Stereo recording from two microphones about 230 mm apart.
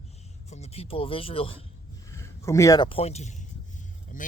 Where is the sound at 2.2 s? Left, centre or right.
Centre.